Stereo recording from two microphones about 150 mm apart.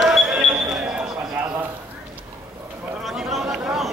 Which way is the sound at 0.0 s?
Centre (ahead or behind).